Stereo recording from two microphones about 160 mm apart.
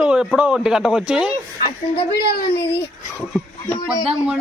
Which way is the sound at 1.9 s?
80° left.